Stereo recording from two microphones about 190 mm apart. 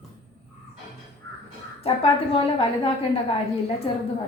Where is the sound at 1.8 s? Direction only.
30° left (ahead or behind).